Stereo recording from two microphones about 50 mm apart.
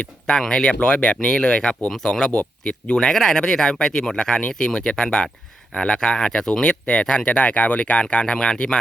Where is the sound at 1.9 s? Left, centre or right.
Centre.